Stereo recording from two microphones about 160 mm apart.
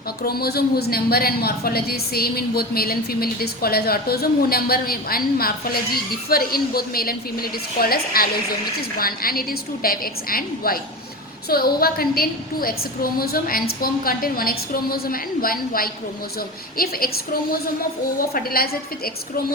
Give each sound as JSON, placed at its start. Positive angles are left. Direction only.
{"t": 0.2, "sound": "a woman's voice", "side_deg": 75}
{"t": 18.3, "sound": "a woman's voice", "side_deg": 70}